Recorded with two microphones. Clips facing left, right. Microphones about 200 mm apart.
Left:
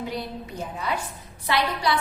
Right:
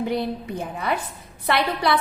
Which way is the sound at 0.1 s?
60° right (ahead or behind).